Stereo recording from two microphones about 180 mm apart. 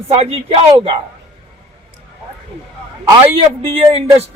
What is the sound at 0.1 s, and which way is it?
Speech, 35° right (ahead or behind).